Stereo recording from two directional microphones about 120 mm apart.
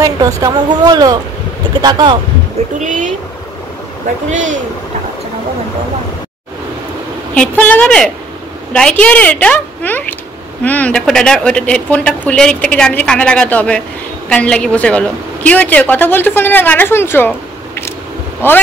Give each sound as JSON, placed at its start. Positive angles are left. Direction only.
{"t": 0.0, "sound": "a woman's voice", "side_deg": -30}
{"t": 2.8, "sound": "speech", "side_deg": -90}
{"t": 4.3, "sound": "speech", "side_deg": -90}
{"t": 7.3, "sound": "speech", "side_deg": 10}
{"t": 18.4, "sound": "speech", "side_deg": 20}